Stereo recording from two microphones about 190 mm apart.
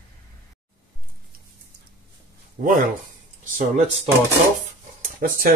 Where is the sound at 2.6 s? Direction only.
45° right (ahead or behind).